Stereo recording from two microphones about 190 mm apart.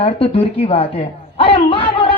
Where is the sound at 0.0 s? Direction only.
30° left (ahead or behind).